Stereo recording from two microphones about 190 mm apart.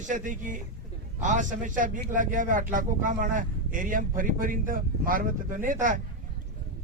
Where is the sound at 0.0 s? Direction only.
45° right (ahead or behind).